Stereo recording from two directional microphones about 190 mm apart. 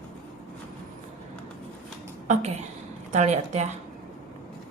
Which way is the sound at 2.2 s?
35° right (ahead or behind).